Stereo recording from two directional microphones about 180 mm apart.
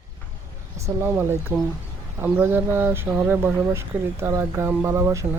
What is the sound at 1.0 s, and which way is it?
Speech, 15° right (ahead or behind).